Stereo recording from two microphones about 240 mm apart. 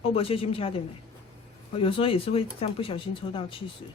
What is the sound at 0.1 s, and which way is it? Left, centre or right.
Speech, left.